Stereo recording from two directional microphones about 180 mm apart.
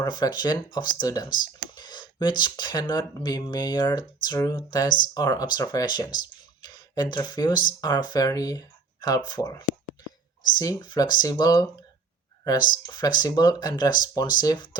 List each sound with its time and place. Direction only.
0.0 s speech: 25° left (ahead or behind)